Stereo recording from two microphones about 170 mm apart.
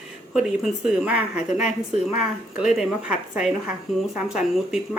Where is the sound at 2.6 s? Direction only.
5° right (ahead or behind).